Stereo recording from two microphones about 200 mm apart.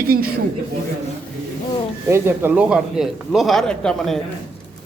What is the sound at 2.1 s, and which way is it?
Speech, 10° right (ahead or behind).